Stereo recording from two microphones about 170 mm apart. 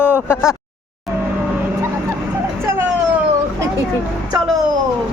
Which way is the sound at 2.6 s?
15° right (ahead or behind).